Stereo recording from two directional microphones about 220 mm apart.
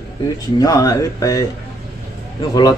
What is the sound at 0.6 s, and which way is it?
Speech, 15° left (ahead or behind).